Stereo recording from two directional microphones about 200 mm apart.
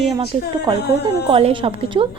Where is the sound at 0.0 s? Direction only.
30° right (ahead or behind).